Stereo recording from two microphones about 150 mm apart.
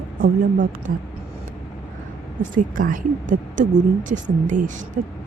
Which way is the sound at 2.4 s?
60° right (ahead or behind).